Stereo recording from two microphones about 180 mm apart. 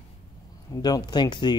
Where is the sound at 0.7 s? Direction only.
20° left (ahead or behind).